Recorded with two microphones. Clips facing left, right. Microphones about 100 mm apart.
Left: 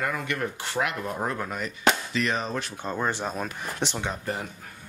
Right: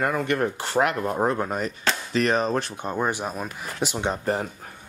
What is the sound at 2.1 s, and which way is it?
Speech, 45° right (ahead or behind).